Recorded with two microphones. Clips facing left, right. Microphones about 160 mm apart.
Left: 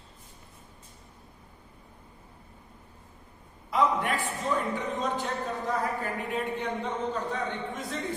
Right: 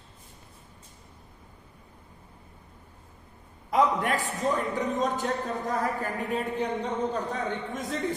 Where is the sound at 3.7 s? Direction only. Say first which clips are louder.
Right 2 dB; 40° right (ahead or behind).